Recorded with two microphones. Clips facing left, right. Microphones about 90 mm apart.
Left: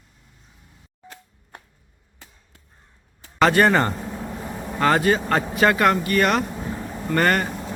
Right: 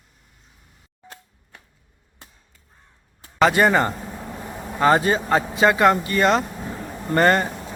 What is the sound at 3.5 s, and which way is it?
Speech, 15° right (ahead or behind).